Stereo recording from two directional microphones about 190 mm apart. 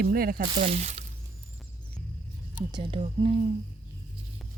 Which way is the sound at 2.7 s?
25° right (ahead or behind).